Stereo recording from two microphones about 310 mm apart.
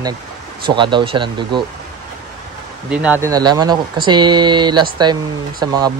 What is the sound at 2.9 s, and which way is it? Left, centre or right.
Speech, centre.